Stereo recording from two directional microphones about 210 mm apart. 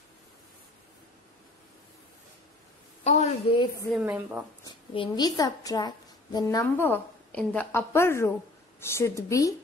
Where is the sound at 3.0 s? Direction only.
35° left (ahead or behind).